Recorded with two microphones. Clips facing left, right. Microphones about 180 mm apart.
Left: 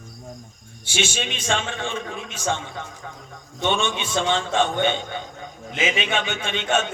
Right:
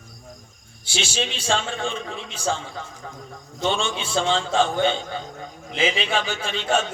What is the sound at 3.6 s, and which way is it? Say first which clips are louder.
A man's voice: left 1 dB; 30° right (ahead or behind).